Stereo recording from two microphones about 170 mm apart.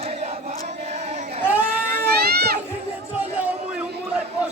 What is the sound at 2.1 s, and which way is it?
Children playing, 70° right (ahead or behind).